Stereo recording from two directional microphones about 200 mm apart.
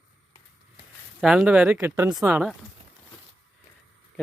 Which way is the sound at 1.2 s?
5° right (ahead or behind).